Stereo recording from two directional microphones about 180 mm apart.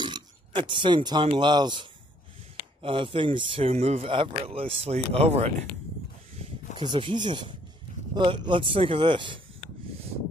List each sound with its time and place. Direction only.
0.0 s speech: 25° right (ahead or behind)